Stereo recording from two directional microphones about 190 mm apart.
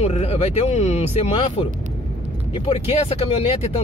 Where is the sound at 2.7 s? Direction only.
30° left (ahead or behind).